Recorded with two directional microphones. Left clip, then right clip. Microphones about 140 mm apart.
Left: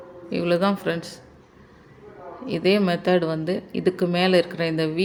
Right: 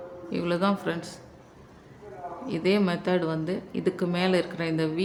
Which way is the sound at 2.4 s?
25° left (ahead or behind).